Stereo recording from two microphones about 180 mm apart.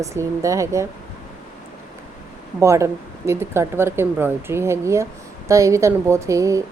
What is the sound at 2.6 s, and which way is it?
A woman's voice, 15° right (ahead or behind).